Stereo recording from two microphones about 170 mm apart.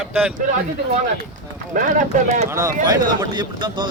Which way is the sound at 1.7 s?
50° right (ahead or behind).